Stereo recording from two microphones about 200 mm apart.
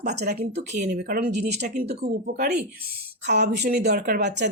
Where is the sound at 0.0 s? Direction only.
55° right (ahead or behind).